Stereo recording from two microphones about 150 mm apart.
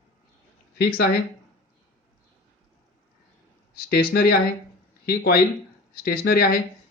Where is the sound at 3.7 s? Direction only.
90° left.